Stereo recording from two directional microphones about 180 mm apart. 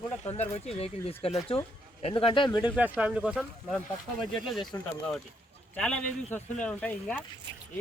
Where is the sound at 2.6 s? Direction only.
10° right (ahead or behind).